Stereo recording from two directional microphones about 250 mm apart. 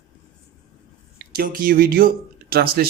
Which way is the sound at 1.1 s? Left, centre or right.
Right.